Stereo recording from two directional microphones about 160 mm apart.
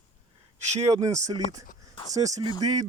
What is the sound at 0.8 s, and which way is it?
Speech, 20° right (ahead or behind).